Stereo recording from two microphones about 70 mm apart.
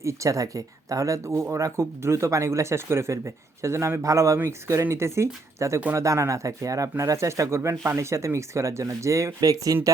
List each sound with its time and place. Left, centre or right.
0.0 s speech: right
9.4 s speech: right